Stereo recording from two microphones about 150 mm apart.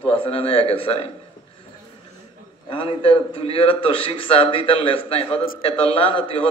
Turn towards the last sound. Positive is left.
turn(degrees=35)  # may be behind; listen again after turning